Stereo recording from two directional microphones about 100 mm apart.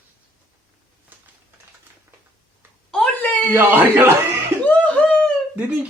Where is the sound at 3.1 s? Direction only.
15° left (ahead or behind).